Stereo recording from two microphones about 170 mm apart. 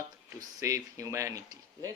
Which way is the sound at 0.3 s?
20° right (ahead or behind).